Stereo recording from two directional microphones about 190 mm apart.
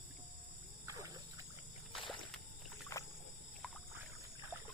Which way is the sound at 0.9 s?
15° right (ahead or behind).